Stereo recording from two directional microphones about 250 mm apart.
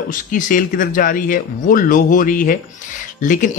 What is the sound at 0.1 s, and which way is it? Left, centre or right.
Speech, left.